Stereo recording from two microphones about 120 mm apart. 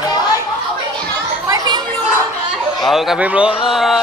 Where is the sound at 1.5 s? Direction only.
35° right (ahead or behind).